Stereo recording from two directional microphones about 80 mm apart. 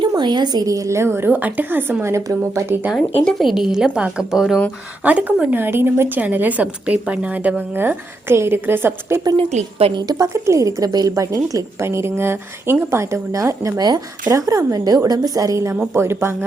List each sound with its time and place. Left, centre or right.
0.2 s a woman's voice: right
3.2 s speech: centre
5.0 s a woman's voice: centre
10.1 s a woman's voice: right
11.8 s a woman's voice: right
13.8 s a woman's voice: right
16.0 s a woman's voice: right